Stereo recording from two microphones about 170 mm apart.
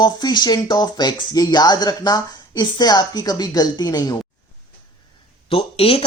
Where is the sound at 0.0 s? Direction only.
25° left (ahead or behind).